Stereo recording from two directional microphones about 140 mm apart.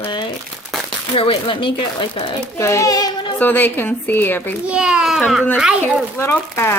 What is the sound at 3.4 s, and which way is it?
A woman's voice, 15° left (ahead or behind).